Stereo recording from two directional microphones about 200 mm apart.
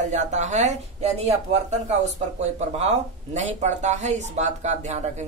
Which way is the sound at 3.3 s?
35° right (ahead or behind).